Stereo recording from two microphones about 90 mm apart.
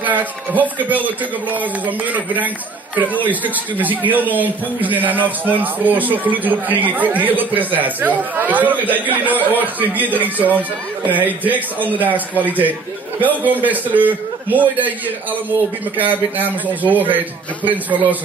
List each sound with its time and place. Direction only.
0.0 s a man's voice: 20° right (ahead or behind)
16.0 s a man's voice: 20° right (ahead or behind)